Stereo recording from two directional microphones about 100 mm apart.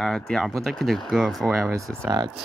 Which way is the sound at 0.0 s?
5° left (ahead or behind).